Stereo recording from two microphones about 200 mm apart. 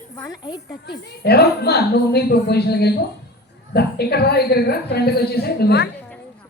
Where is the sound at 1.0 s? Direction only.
55° left (ahead or behind).